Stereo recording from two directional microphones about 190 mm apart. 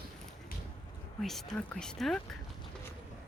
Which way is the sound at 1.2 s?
Centre (ahead or behind).